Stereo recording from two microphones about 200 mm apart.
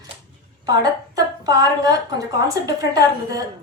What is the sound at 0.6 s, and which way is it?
A woman's voice, 20° right (ahead or behind).